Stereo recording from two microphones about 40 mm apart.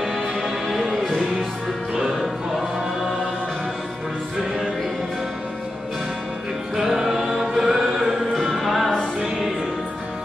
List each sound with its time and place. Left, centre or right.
0.0 s music: centre
6.8 s music: centre